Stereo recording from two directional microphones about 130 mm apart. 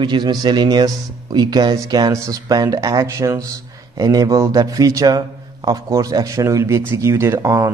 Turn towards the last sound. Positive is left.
turn(degrees=-25)  # may be behind; listen again after turning